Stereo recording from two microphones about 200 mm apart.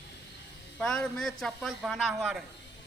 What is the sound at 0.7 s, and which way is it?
A man's voice, 5° left (ahead or behind).